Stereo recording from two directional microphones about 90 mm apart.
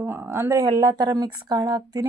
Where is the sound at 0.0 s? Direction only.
25° right (ahead or behind).